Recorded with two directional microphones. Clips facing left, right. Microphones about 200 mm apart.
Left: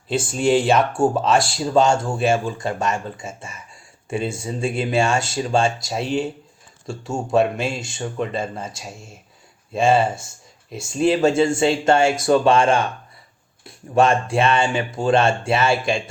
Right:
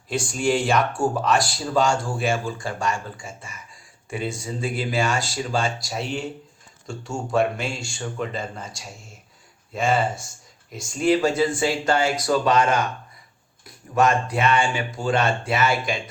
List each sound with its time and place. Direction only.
1.1 s speech: 25° left (ahead or behind)